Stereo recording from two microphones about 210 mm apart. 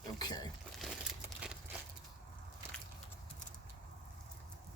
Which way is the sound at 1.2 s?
5° right (ahead or behind).